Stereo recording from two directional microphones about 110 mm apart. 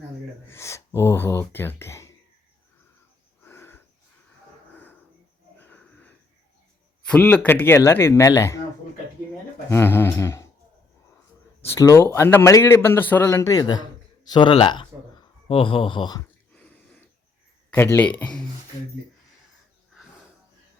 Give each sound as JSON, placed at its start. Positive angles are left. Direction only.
{"t": 0.4, "sound": "speech", "side_deg": 25}
{"t": 3.4, "sound": "wheeze", "side_deg": 20}
{"t": 5.5, "sound": "wheeze", "side_deg": 15}
{"t": 7.1, "sound": "a man's voice", "side_deg": 15}
{"t": 9.6, "sound": "a man's voice", "side_deg": 25}
{"t": 11.8, "sound": "a man's voice", "side_deg": 30}
{"t": 13.6, "sound": "speech", "side_deg": 40}
{"t": 16.5, "sound": "a sound", "side_deg": 10}
{"t": 17.7, "sound": "speech", "side_deg": 20}
{"t": 18.2, "sound": "a man's voice", "side_deg": 10}